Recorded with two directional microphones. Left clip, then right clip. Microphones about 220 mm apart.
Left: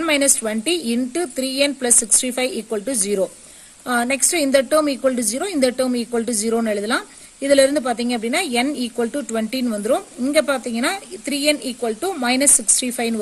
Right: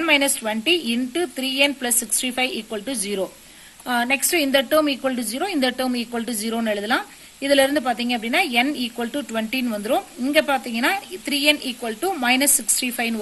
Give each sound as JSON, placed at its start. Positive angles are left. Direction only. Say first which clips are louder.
{"t": 0.0, "sound": "a woman's voice", "louder": "even", "side_deg": 50}